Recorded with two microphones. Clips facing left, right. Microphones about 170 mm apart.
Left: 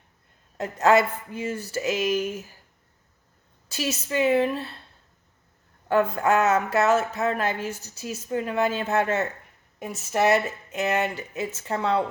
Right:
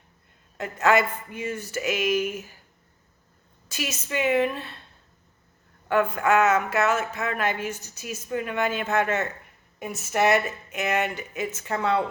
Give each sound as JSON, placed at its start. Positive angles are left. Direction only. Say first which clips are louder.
{"t": 0.5, "sound": "speech", "louder": "left 2 dB", "side_deg": 35}
{"t": 3.7, "sound": "speech", "louder": "left 3 dB", "side_deg": 35}
{"t": 5.9, "sound": "speech", "louder": "even", "side_deg": 35}